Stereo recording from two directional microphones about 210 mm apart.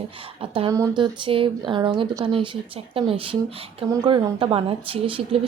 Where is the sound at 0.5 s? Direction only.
20° right (ahead or behind).